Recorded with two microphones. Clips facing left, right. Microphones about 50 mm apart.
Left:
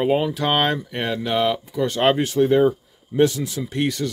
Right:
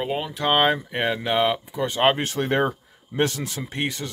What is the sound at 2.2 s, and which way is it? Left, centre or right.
Speech, right.